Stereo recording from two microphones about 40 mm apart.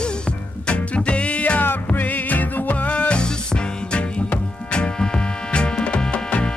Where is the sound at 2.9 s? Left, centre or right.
Left.